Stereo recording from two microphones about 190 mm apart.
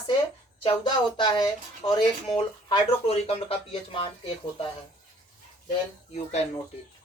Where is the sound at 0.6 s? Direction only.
25° left (ahead or behind).